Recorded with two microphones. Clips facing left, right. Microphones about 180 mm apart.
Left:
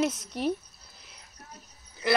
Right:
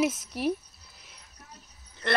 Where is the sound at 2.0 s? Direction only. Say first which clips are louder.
Left 2 dB; 5° left (ahead or behind).